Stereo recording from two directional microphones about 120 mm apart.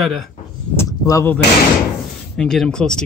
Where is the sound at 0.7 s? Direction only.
25° left (ahead or behind).